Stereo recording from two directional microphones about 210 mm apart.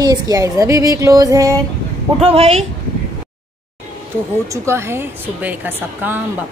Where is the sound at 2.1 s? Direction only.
30° right (ahead or behind).